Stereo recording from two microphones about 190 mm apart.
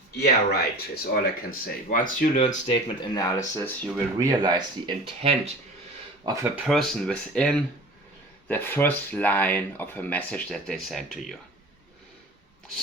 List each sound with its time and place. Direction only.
0.2 s speech: 55° left (ahead or behind)
2.6 s speech: 25° left (ahead or behind)
4.2 s speech: 20° right (ahead or behind)
6.7 s speech: centre (ahead or behind)